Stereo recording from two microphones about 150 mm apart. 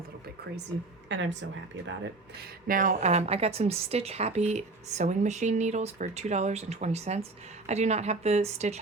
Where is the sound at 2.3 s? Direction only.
75° right (ahead or behind).